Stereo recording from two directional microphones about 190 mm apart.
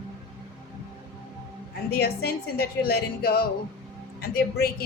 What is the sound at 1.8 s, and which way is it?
A woman's voice, 55° left (ahead or behind).